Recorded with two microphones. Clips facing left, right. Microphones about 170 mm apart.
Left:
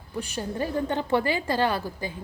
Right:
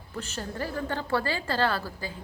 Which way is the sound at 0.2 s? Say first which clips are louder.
Left 4 dB; 15° left (ahead or behind).